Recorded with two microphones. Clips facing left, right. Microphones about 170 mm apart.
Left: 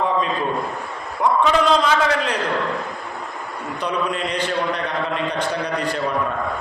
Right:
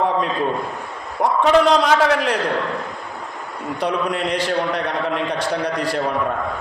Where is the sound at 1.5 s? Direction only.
65° right (ahead or behind).